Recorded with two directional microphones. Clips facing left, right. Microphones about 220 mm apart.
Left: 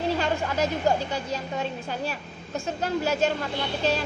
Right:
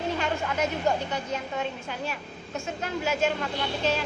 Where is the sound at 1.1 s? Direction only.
35° left (ahead or behind).